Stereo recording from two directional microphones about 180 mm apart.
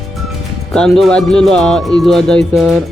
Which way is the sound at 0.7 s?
Centre (ahead or behind).